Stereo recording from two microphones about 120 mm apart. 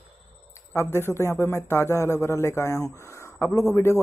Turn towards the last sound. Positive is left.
turn(degrees=20)  # may be behind; listen again after turning